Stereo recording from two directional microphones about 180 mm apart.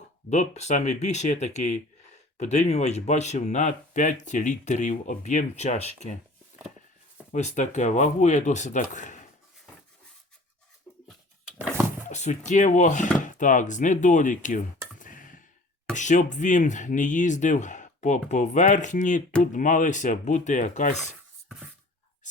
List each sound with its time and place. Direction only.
0.3 s speech: 40° left (ahead or behind)
7.3 s speech: 40° left (ahead or behind)
12.0 s a sound: 40° left (ahead or behind)
12.5 s speech: 40° left (ahead or behind)
14.9 s a sound: 45° left (ahead or behind)
16.0 s speech: 40° left (ahead or behind)